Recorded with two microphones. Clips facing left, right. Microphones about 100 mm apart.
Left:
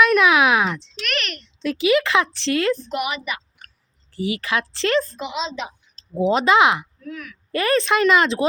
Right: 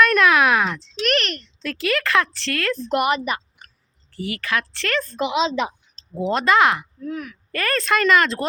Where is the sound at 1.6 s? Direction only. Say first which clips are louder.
Left 6 dB; 15° left (ahead or behind).